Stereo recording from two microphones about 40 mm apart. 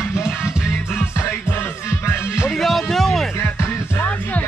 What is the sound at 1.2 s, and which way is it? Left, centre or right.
Music, left.